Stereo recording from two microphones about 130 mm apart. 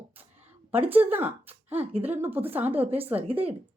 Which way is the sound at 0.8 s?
15° right (ahead or behind).